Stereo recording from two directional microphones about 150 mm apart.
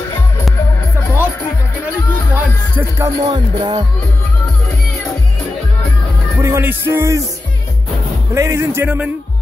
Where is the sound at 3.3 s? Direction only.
30° right (ahead or behind).